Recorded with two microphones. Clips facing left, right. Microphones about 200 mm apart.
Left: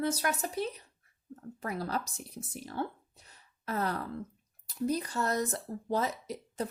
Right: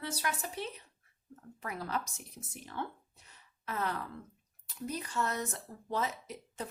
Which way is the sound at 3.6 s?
40° left (ahead or behind).